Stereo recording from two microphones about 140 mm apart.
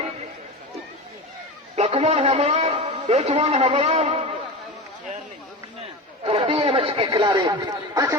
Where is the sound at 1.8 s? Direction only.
45° right (ahead or behind).